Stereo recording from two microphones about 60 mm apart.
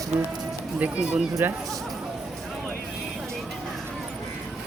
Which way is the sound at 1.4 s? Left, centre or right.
Right.